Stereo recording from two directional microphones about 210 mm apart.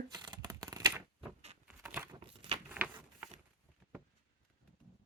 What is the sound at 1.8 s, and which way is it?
Crumpling, 10° right (ahead or behind).